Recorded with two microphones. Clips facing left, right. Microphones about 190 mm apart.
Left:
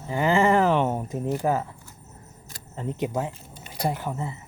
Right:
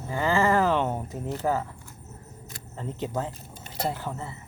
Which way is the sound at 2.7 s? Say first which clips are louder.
Left 3 dB; 15° left (ahead or behind).